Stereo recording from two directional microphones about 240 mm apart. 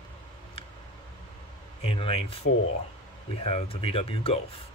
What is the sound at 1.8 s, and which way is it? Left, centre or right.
Speech, left.